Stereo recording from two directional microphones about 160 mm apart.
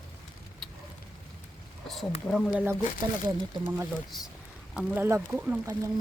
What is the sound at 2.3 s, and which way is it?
Speech, 5° left (ahead or behind).